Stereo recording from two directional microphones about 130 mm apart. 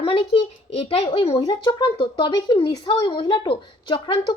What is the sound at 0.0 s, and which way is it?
A child's voice, 45° left (ahead or behind).